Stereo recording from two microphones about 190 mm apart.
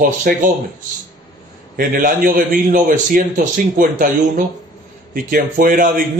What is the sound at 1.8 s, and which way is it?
Speech, 45° right (ahead or behind).